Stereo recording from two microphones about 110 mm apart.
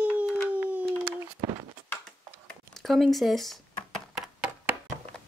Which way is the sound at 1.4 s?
45° right (ahead or behind).